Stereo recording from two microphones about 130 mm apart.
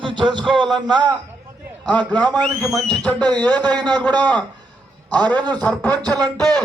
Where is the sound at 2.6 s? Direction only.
5° left (ahead or behind).